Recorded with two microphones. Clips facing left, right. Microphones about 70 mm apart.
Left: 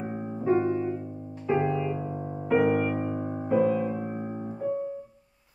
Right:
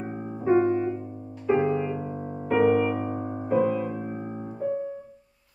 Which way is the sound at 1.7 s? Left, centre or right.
Right.